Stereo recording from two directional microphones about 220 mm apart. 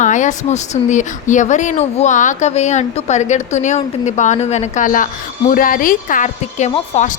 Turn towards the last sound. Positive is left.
turn(degrees=30)  # may be behind; listen again after turning